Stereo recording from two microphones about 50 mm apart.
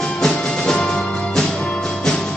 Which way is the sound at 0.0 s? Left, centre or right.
Centre.